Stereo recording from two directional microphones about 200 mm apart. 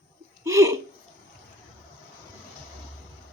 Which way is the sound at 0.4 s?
15° right (ahead or behind).